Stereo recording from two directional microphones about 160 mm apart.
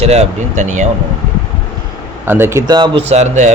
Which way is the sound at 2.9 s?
40° right (ahead or behind).